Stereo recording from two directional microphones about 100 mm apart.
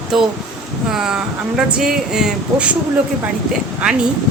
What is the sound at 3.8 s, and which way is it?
Speech, 10° right (ahead or behind).